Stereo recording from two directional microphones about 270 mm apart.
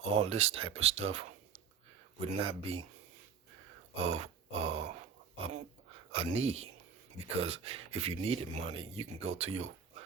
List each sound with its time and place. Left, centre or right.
0.0 s speech: right
3.9 s grunt: right
6.1 s speech: right